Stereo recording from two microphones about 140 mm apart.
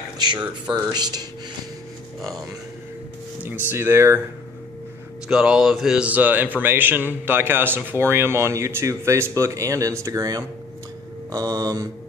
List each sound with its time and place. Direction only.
0.2 s speech: 30° right (ahead or behind)
3.4 s speech: 15° right (ahead or behind)
5.3 s speech: 5° right (ahead or behind); by 9.9 s 20° right (ahead or behind)
10.0 s mantra: 25° right (ahead or behind)